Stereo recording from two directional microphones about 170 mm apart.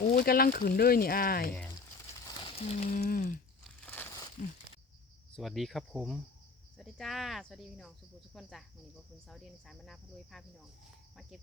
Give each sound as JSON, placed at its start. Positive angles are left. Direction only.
{"t": 0.1, "sound": "speech", "side_deg": 65}
{"t": 2.3, "sound": "a sound", "side_deg": 35}
{"t": 3.0, "sound": "speech", "side_deg": 55}
{"t": 3.8, "sound": "crumpling", "side_deg": 10}
{"t": 5.4, "sound": "speech", "side_deg": 0}